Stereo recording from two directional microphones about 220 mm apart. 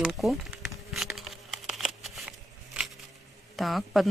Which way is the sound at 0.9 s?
Centre (ahead or behind).